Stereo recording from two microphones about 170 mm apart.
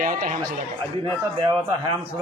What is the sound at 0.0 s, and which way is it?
Speech, 55° right (ahead or behind).